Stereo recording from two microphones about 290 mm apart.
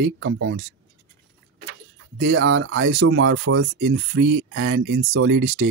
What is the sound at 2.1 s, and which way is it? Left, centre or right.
Speech, right.